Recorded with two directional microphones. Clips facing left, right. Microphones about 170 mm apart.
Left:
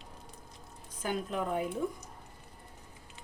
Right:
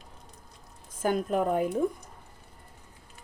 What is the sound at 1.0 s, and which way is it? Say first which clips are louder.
Speech: right 7 dB; 50° right (ahead or behind).